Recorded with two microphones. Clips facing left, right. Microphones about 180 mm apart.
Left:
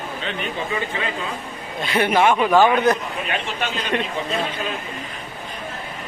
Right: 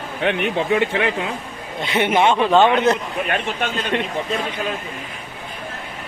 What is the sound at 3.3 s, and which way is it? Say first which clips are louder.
Speech: right 2 dB; 50° right (ahead or behind).